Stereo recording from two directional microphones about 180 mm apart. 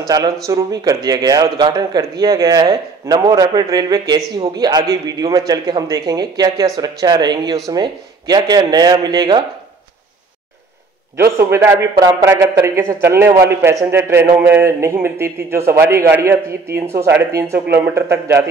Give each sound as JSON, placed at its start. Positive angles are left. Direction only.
{"t": 0.0, "sound": "speech", "side_deg": -20}
{"t": 11.1, "sound": "a man's voice", "side_deg": -15}